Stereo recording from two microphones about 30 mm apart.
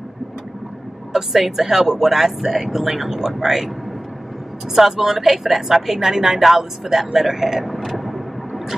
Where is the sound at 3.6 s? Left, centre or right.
Centre.